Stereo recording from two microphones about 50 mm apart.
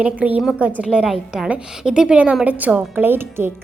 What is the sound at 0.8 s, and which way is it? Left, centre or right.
A woman's voice, centre.